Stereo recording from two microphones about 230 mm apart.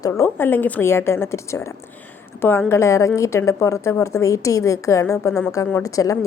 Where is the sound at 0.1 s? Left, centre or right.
Centre.